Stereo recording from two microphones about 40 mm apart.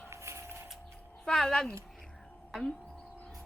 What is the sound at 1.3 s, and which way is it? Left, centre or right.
Speech, centre.